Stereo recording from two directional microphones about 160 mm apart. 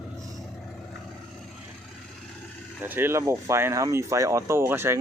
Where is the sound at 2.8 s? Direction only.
15° right (ahead or behind).